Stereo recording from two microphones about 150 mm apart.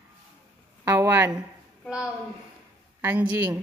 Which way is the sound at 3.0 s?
15° right (ahead or behind).